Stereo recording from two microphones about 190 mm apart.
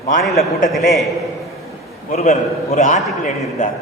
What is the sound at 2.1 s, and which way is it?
Speech, 35° left (ahead or behind).